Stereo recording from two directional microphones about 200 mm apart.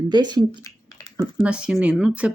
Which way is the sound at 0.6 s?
20° left (ahead or behind).